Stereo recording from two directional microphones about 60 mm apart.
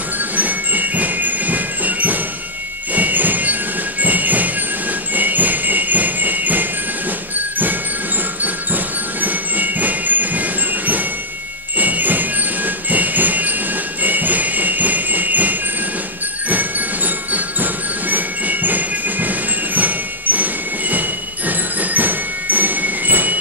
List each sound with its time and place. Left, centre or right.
0.4 s music: right
2.9 s train: right
4.0 s music: right
5.1 s jingle bell: right
8.7 s music: right
14.0 s jingle bell: right
16.4 s music: right
21.5 s music: right